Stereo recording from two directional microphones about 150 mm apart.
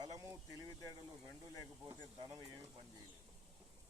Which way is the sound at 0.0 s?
20° right (ahead or behind).